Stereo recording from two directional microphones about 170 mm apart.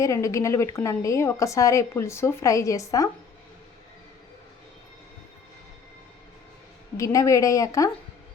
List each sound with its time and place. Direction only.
0.0 s a woman's voice: 20° left (ahead or behind)
6.9 s a woman's voice: 20° left (ahead or behind)